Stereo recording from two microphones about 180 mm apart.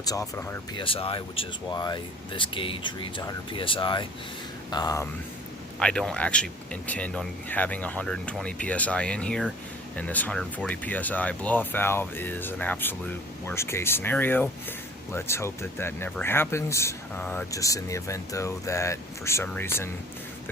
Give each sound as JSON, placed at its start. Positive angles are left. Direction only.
{"t": 0.0, "sound": "speech", "side_deg": 20}
{"t": 0.8, "sound": "speech", "side_deg": 30}
{"t": 5.8, "sound": "speech", "side_deg": 5}